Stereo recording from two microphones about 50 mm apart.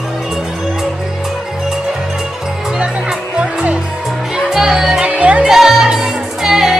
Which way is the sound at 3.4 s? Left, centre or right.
Right.